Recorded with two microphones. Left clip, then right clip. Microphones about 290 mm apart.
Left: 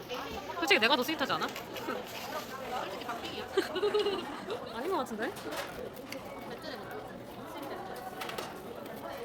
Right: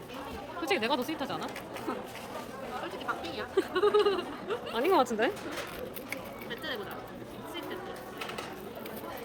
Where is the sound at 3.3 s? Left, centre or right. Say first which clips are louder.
Right 2 dB; centre.